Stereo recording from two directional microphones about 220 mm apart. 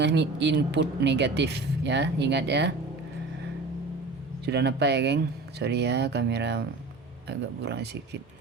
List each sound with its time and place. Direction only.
0.0 s a woman's voice: 50° right (ahead or behind)
4.4 s a woman's voice: 50° right (ahead or behind)